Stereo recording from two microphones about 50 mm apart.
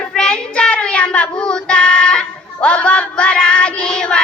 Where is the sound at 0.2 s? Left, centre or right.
Centre.